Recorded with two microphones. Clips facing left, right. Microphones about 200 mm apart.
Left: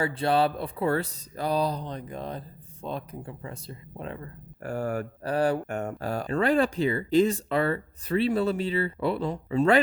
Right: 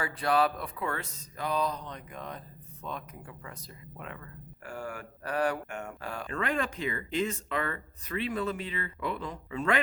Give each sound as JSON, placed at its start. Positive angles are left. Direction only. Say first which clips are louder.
{"t": 0.0, "sound": "speech", "louder": "left 4 dB", "side_deg": 30}
{"t": 5.2, "sound": "speech", "louder": "left 4 dB", "side_deg": 30}